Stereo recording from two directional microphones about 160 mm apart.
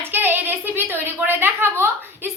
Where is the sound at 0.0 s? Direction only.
10° right (ahead or behind).